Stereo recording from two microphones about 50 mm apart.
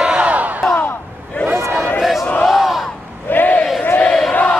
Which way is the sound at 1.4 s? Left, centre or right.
Left.